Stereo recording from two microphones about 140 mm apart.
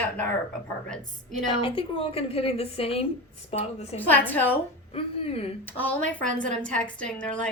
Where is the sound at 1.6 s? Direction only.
40° left (ahead or behind).